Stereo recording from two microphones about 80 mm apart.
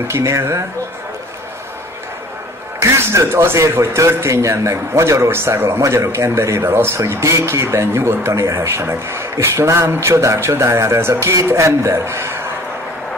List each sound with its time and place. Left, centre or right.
0.1 s a man's voice: right
2.8 s a man's voice: right